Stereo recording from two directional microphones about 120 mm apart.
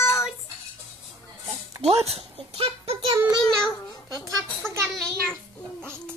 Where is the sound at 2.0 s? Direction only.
55° right (ahead or behind).